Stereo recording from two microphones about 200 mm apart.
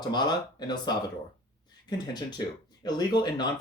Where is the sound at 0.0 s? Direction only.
20° left (ahead or behind).